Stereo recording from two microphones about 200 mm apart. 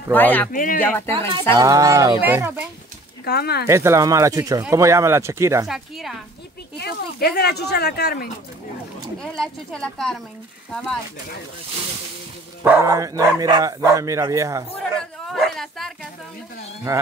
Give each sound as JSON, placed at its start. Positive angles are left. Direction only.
{"t": 0.1, "sound": "speech", "side_deg": 10}
{"t": 0.5, "sound": "speech", "side_deg": 45}
{"t": 0.8, "sound": "speech", "side_deg": 10}
{"t": 1.6, "sound": "speech", "side_deg": -15}
{"t": 3.3, "sound": "speech", "side_deg": 55}
{"t": 3.6, "sound": "speech", "side_deg": -15}
{"t": 5.7, "sound": "a woman's voice", "side_deg": 0}
{"t": 6.8, "sound": "speech", "side_deg": 55}
{"t": 9.2, "sound": "a woman's voice", "side_deg": 5}
{"t": 12.6, "sound": "speech", "side_deg": -10}
{"t": 14.7, "sound": "a sound", "side_deg": 5}